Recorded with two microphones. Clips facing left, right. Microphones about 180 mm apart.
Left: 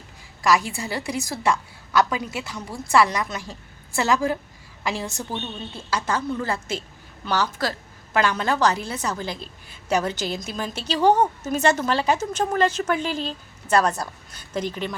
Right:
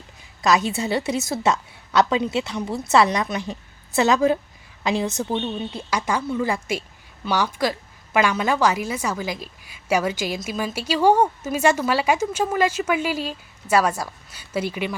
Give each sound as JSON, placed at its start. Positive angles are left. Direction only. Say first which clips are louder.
{"t": 0.4, "sound": "a woman's voice", "louder": "right 2 dB", "side_deg": -20}